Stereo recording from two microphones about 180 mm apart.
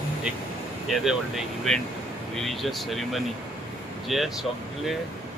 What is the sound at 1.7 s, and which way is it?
Speech, centre (ahead or behind).